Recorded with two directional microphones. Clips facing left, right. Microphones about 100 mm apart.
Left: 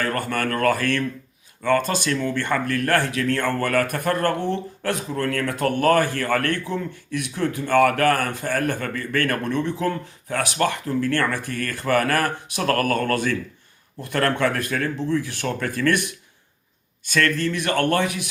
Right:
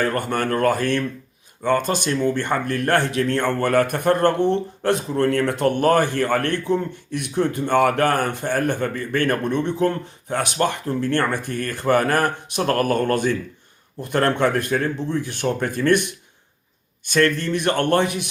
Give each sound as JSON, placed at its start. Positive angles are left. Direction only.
{"t": 0.0, "sound": "speech", "side_deg": -25}
{"t": 17.2, "sound": "speech", "side_deg": -20}